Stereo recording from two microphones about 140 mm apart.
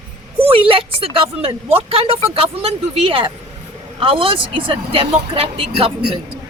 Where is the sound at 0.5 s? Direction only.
40° right (ahead or behind).